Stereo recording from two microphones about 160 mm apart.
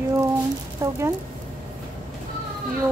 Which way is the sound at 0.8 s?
20° right (ahead or behind).